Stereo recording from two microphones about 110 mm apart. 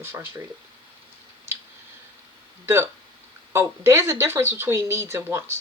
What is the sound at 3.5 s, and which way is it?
Speech, 25° right (ahead or behind).